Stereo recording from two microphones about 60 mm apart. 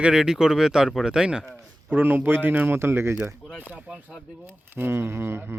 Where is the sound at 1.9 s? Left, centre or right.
Right.